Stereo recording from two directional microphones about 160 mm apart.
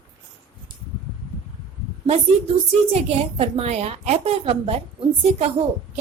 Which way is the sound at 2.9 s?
40° right (ahead or behind).